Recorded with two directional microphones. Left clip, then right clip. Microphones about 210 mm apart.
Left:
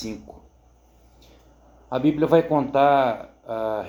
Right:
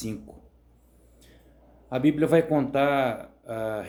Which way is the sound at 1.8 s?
20° right (ahead or behind).